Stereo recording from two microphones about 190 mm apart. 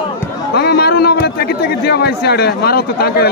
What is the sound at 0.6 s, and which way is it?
A man's voice, 55° left (ahead or behind).